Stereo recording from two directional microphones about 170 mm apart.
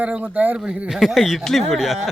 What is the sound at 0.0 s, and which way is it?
Speech, 10° right (ahead or behind).